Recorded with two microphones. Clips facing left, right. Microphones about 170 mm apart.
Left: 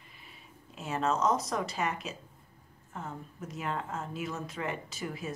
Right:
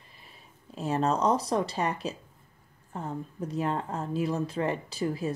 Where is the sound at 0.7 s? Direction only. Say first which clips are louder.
Right 4 dB; 35° right (ahead or behind).